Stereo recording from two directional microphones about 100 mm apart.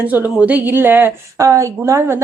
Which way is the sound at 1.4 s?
30° right (ahead or behind).